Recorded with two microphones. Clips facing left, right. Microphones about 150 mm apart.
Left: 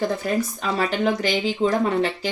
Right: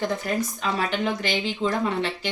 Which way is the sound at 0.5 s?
40° left (ahead or behind).